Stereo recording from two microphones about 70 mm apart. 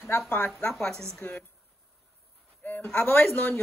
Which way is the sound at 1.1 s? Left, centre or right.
Left.